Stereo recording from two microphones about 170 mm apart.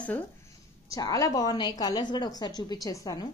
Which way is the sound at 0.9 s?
20° left (ahead or behind).